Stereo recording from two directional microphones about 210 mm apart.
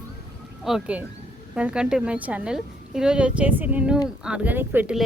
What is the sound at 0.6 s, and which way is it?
A woman's voice, 5° right (ahead or behind).